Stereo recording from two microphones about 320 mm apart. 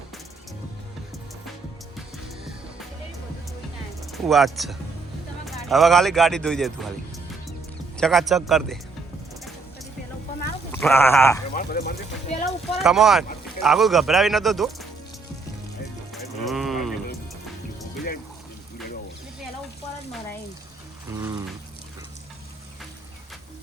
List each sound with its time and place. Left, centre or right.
4.1 s speech: centre
7.9 s speech: centre
10.7 s speech: centre
11.5 s speech: left
12.8 s speech: centre
16.5 s a sound: centre
21.1 s a sound: centre